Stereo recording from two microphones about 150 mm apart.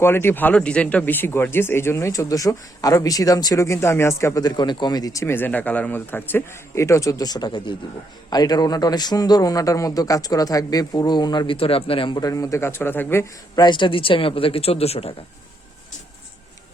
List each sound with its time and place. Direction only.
0.0 s a man's voice: 15° left (ahead or behind)
13.6 s speech: 30° left (ahead or behind)